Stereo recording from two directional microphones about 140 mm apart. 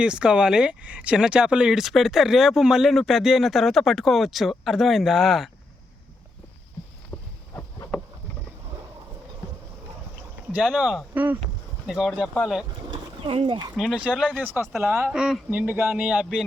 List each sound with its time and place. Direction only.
0.0 s speech: 5° right (ahead or behind)
7.1 s a sound: 35° left (ahead or behind)
10.5 s speech: 5° right (ahead or behind)
12.9 s roaring cats: 40° right (ahead or behind)
13.7 s speech: 5° right (ahead or behind)